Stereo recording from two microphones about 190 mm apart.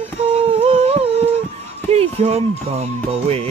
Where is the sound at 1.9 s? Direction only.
30° right (ahead or behind).